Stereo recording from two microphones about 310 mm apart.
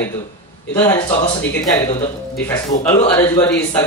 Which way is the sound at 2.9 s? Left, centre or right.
Centre.